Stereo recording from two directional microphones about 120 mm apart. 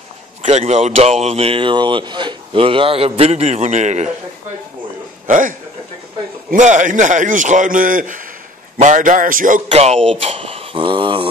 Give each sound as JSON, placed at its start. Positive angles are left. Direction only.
{"t": 0.4, "sound": "speech", "side_deg": -65}
{"t": 5.2, "sound": "speech", "side_deg": -90}
{"t": 6.5, "sound": "a man's voice", "side_deg": -90}
{"t": 10.0, "sound": "speech", "side_deg": -50}